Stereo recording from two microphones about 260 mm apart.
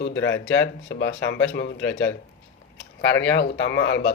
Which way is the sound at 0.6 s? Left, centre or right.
Left.